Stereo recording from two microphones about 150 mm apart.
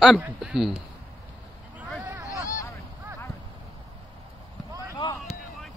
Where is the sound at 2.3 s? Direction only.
20° left (ahead or behind).